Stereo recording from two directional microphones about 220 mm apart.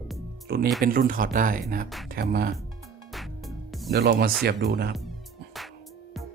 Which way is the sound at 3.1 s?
Centre (ahead or behind).